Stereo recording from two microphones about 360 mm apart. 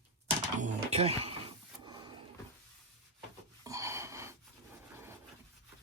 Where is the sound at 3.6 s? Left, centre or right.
Centre.